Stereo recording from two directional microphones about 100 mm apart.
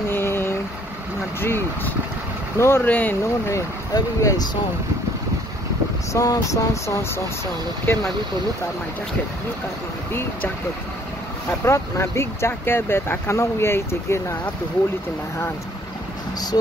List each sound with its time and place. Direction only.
0.1 s vehicle: 25° left (ahead or behind)
2.5 s speech: 25° left (ahead or behind)
3.9 s vehicle: 35° left (ahead or behind)
6.1 s vehicle: 35° left (ahead or behind)
7.8 s speech: 25° left (ahead or behind)
11.6 s speech: 25° left (ahead or behind)